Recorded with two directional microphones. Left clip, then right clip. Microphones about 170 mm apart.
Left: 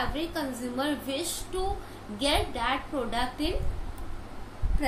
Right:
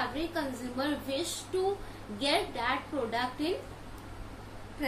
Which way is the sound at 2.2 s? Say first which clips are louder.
Left 2 dB; 30° left (ahead or behind).